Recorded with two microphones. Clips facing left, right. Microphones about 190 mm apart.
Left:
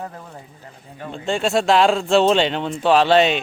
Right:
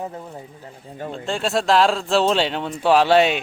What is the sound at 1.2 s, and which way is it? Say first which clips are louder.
Speech: left 3 dB; centre (ahead or behind).